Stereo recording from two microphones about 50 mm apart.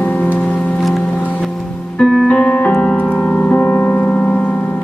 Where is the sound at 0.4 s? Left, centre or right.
Left.